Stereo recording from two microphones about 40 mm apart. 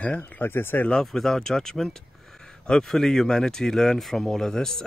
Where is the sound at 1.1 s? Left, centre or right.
Centre.